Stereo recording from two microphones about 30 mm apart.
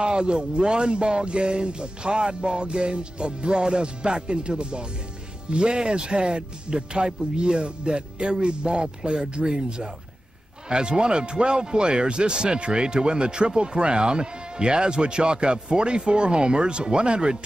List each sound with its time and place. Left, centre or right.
0.0 s speech: right